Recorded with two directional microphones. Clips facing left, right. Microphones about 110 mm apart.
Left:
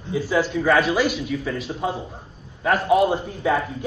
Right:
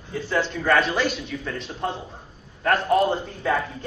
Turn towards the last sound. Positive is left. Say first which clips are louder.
# left 2 dB
turn(degrees=5)  # may be behind; listen again after turning